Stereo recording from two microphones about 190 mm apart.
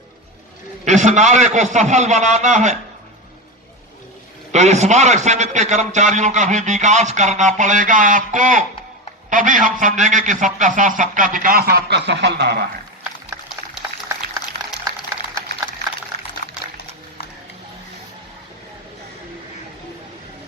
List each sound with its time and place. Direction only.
0.9 s a man's voice: 40° right (ahead or behind)
4.5 s a man's voice: 35° right (ahead or behind); by 12.6 s 60° right (ahead or behind)